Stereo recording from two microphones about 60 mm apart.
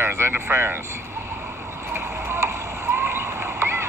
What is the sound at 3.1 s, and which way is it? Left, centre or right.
Rowboat, right.